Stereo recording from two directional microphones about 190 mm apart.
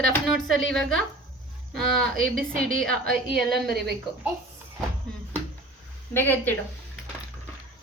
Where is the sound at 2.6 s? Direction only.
50° right (ahead or behind).